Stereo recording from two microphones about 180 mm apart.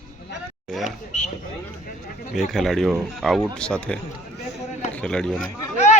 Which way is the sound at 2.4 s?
Centre (ahead or behind).